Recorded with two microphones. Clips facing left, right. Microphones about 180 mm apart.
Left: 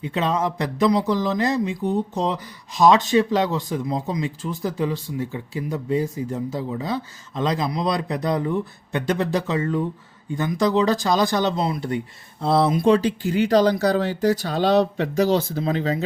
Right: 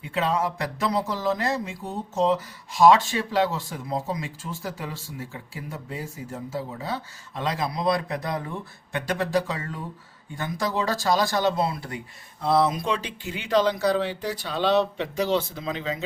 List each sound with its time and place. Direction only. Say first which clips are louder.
0.0 s speech: left 3 dB; 20° left (ahead or behind); by 16.0 s 40° left (ahead or behind)